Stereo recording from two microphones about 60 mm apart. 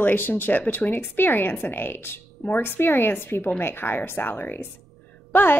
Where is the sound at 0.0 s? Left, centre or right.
Left.